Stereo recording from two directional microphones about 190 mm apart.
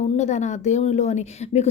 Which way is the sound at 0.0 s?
40° left (ahead or behind).